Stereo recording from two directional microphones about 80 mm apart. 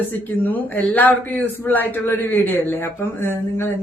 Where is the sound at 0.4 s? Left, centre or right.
Left.